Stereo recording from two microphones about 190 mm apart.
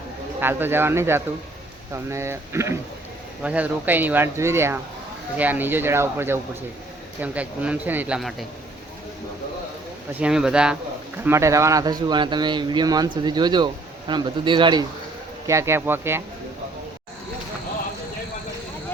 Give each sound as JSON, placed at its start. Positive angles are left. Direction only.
{"t": 0.3, "sound": "speech", "side_deg": -10}
{"t": 10.2, "sound": "speech", "side_deg": -5}